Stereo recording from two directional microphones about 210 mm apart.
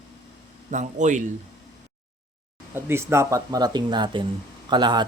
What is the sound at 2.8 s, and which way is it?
A man's voice, 10° right (ahead or behind).